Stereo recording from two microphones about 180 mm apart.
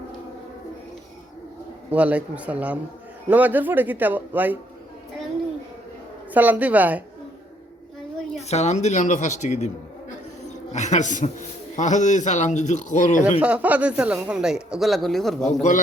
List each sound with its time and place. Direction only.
1.9 s speech: 5° right (ahead or behind)
6.3 s speech: 10° right (ahead or behind)
8.4 s a man's voice: 40° left (ahead or behind)
13.4 s speech: 5° right (ahead or behind)